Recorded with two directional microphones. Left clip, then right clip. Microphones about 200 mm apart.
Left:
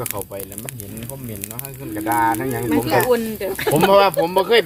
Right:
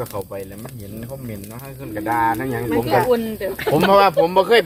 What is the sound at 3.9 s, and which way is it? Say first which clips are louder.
Speech: right 2 dB; 10° right (ahead or behind).